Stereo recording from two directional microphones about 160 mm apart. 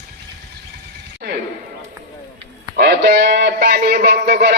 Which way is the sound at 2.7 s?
80° right.